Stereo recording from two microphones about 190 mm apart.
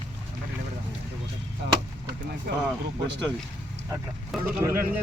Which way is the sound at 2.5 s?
55° right (ahead or behind).